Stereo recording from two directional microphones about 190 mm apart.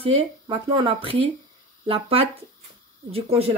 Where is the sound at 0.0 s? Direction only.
30° right (ahead or behind).